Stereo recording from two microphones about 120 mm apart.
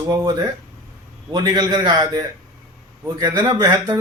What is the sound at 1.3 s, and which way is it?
A man's voice, 35° right (ahead or behind).